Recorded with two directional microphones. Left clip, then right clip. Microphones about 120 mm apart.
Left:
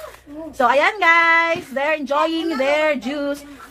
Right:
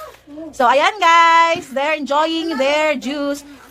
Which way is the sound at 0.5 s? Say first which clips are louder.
Right 2 dB; 35° right (ahead or behind).